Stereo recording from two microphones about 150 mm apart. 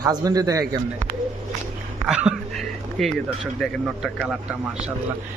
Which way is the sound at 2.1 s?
5° right (ahead or behind).